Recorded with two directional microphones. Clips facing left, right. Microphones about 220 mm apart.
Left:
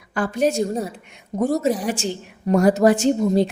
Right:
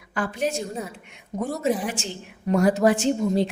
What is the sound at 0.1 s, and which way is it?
A woman's voice, 40° left (ahead or behind).